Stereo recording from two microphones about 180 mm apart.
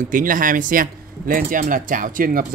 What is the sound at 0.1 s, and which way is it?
Speech, 50° right (ahead or behind).